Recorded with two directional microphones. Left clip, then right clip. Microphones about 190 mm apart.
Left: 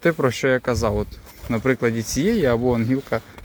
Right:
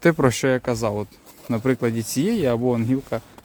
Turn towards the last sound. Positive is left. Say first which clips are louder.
# left 2 dB
turn(degrees=-10)  # may be behind; listen again after turning